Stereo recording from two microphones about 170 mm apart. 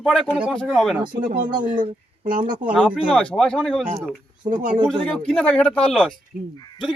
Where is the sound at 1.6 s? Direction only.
50° right (ahead or behind).